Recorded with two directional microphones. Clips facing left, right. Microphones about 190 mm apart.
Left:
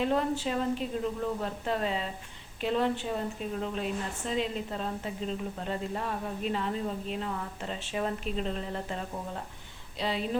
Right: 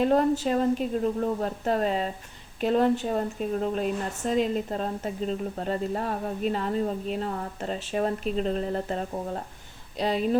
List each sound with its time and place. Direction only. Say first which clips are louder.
0.0 s a woman's voice: right 6 dB; 40° right (ahead or behind)